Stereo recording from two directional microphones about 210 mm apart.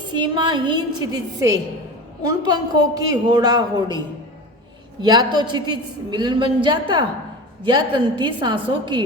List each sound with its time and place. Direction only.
0.2 s a woman's voice: 20° right (ahead or behind)
5.0 s a woman's voice: 20° right (ahead or behind)